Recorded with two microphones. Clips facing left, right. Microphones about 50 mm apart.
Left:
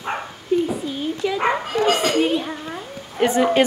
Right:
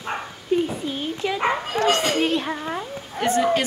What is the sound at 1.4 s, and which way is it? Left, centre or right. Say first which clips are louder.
Dog: left 2 dB; centre.